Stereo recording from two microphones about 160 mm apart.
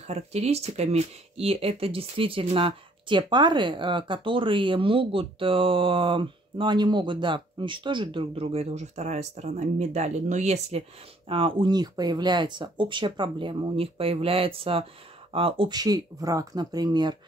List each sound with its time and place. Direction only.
0.1 s speech: 40° right (ahead or behind); by 17.2 s 25° right (ahead or behind)